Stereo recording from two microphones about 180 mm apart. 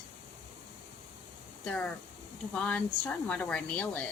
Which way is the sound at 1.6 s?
5° left (ahead or behind).